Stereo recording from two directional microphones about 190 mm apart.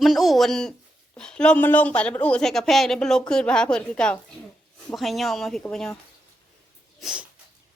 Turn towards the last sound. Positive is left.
turn(degrees=0)  # may be behind; listen again after turning